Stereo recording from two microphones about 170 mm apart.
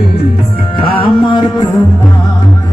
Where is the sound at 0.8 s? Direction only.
30° left (ahead or behind).